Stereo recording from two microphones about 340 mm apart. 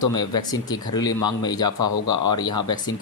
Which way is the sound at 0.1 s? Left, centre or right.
Centre.